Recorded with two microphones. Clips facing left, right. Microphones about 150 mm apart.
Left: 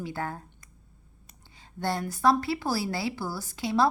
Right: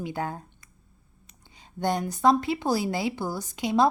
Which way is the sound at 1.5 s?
20° right (ahead or behind).